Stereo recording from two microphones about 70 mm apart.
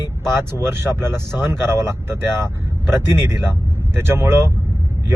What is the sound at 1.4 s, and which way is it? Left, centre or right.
Speech, right.